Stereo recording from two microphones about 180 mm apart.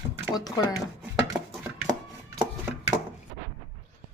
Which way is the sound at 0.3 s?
20° left (ahead or behind).